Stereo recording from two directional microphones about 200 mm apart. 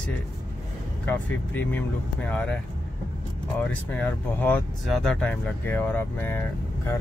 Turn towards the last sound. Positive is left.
turn(degrees=10)  # may be behind; listen again after turning